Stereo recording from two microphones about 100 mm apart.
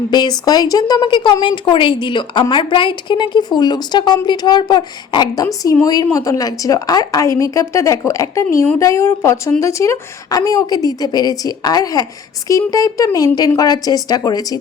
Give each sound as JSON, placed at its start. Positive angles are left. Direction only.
{"t": 0.1, "sound": "a woman's voice", "side_deg": 45}